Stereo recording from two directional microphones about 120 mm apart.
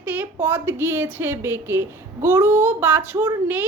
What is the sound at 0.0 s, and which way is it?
A woman's voice, 15° right (ahead or behind).